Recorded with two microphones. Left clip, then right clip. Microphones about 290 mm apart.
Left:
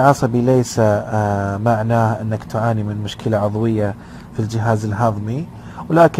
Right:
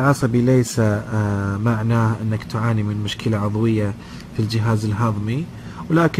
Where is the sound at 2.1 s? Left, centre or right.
Centre.